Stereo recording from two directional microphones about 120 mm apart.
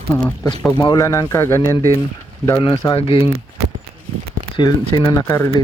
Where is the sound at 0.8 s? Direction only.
30° left (ahead or behind).